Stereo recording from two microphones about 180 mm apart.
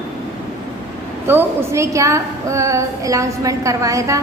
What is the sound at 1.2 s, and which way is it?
A woman's voice, 10° right (ahead or behind).